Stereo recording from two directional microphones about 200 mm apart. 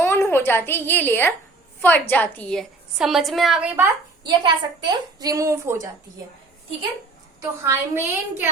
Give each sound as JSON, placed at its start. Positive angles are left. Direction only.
{"t": 0.0, "sound": "a woman's voice", "side_deg": 10}
{"t": 4.2, "sound": "a woman's voice", "side_deg": -25}
{"t": 7.6, "sound": "a woman's voice", "side_deg": -10}